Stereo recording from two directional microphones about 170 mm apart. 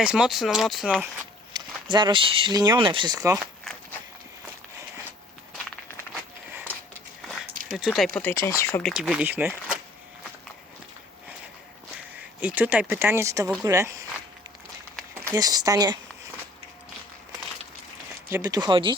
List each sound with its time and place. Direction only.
0.0 s speech: 5° right (ahead or behind)
1.5 s speech: 25° right (ahead or behind)
7.7 s speech: centre (ahead or behind); by 8.8 s 15° left (ahead or behind)
8.8 s speech: centre (ahead or behind)
12.4 s speech: 10° right (ahead or behind)
15.3 s speech: 20° right (ahead or behind)
18.3 s speech: 20° right (ahead or behind)